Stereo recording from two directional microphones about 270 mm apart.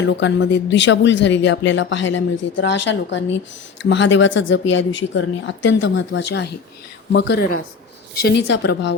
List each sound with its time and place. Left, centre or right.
0.0 s speech: left